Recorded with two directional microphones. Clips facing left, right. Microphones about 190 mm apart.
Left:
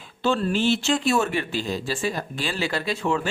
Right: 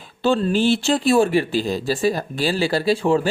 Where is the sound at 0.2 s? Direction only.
30° right (ahead or behind).